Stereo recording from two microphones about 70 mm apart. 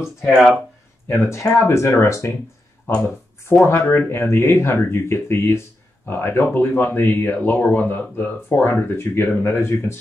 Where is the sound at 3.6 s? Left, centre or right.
Left.